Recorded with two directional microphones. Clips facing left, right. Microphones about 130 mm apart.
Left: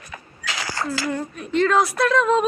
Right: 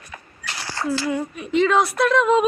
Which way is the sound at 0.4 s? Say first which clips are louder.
Left 4 dB; 90° left.